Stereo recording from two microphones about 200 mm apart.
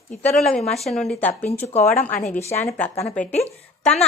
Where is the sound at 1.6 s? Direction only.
30° left (ahead or behind).